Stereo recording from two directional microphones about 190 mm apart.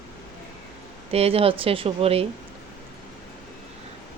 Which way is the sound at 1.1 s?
30° right (ahead or behind).